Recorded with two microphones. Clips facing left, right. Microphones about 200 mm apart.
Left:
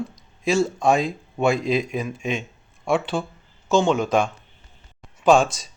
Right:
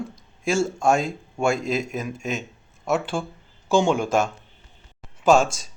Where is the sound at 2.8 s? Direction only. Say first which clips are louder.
Left 2 dB; 5° right (ahead or behind).